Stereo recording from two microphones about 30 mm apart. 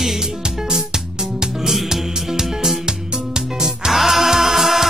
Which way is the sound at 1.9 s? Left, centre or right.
Centre.